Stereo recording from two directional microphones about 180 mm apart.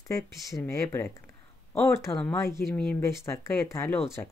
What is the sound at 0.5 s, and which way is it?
Speech, 15° left (ahead or behind).